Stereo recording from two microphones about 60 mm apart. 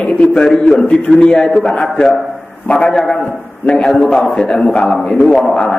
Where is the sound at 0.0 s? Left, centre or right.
Centre.